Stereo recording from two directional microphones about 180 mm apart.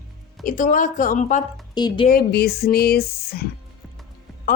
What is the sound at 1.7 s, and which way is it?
Speech, 25° left (ahead or behind).